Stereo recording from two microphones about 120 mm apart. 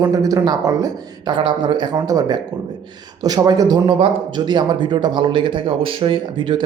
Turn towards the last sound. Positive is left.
turn(degrees=-40)  # may be behind; listen again after turning